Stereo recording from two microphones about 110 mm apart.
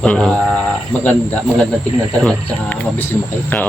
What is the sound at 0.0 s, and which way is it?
Speech, 10° left (ahead or behind).